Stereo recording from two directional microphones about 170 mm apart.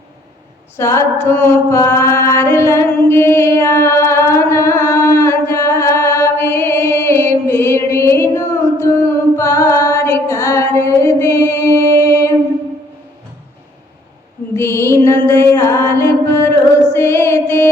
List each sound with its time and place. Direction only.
0.8 s mantra: 15° left (ahead or behind)
8.8 s a sound: 15° left (ahead or behind)
12.0 s music: 15° left (ahead or behind)
14.5 s music: 15° left (ahead or behind)